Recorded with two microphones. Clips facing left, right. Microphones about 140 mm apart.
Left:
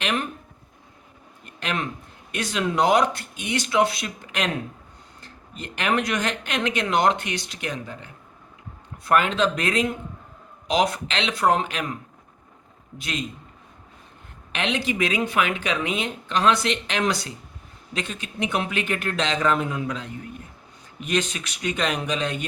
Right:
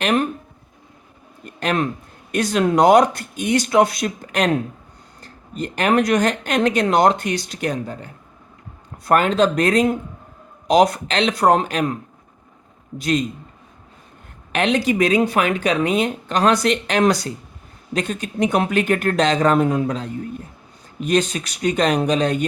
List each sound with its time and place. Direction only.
0.0 s speech: 45° right (ahead or behind)
1.5 s speech: 40° right (ahead or behind)
13.0 s speech: 40° right (ahead or behind)
14.5 s speech: 40° right (ahead or behind)